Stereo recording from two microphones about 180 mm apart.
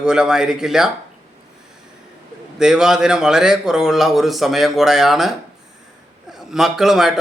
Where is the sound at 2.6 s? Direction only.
5° right (ahead or behind).